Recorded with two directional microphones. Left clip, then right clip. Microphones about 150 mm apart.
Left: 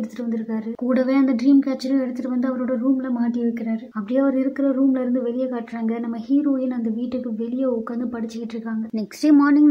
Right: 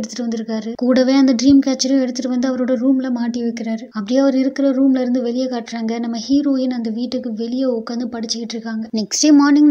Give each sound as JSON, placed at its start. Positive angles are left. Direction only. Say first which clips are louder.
{"t": 0.8, "sound": "a woman's voice", "louder": "right 6 dB", "side_deg": -25}
{"t": 9.3, "sound": "a woman's voice", "louder": "right 3 dB", "side_deg": -25}